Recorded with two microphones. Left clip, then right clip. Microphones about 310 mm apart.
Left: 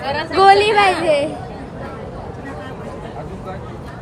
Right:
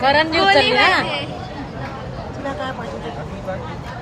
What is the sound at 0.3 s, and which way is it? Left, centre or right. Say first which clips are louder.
Speech: left 3 dB; centre.